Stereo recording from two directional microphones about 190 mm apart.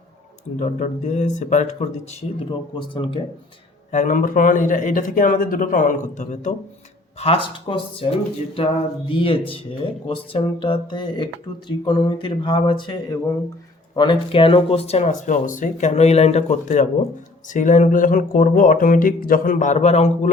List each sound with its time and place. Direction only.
0.6 s speech: 40° left (ahead or behind)
2.7 s speech: 25° left (ahead or behind)
3.9 s speech: 45° left (ahead or behind)
7.2 s speech: 30° left (ahead or behind)